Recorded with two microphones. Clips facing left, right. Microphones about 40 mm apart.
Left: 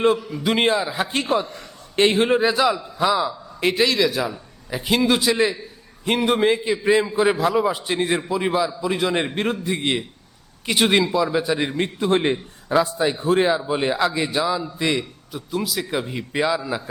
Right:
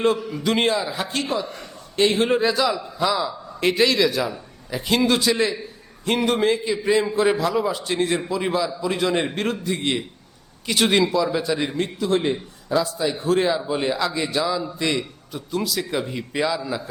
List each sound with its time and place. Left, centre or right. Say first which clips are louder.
0.3 s a man's voice: left 1 dB; centre
1.0 s a man's voice: left 3 dB; left
2.3 s a man's voice: left 2 dB; centre
10.8 s a man's voice: even; centre
11.8 s a man's voice: left 2 dB; left; by 16.9 s centre